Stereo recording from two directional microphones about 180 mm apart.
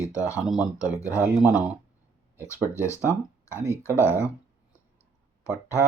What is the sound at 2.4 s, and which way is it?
Speech, 15° left (ahead or behind).